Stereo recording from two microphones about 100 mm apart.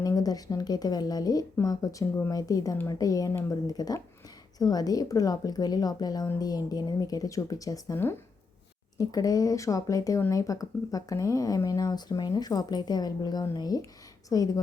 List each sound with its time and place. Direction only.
0.0 s speech: 35° left (ahead or behind)
9.0 s speech: 35° left (ahead or behind)